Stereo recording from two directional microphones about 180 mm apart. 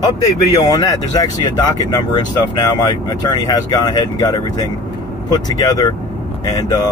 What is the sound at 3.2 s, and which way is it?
Speech, 20° left (ahead or behind).